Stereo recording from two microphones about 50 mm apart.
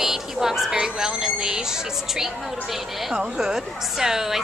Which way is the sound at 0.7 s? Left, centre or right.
Centre.